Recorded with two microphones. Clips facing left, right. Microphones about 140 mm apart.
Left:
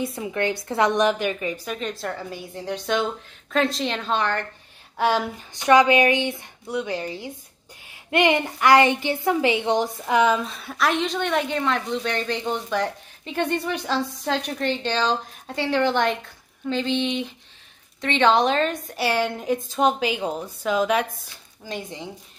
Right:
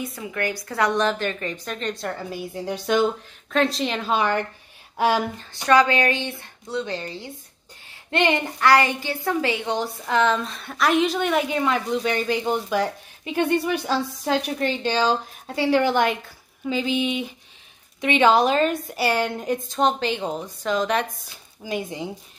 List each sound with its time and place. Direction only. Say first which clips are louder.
0.0 s a woman's voice: left 3 dB; 25° left (ahead or behind); by 5.3 s 5° right (ahead or behind)
5.4 s a woman's voice: left 2 dB; 15° left (ahead or behind)
21.6 s speech: right 4 dB; 10° right (ahead or behind)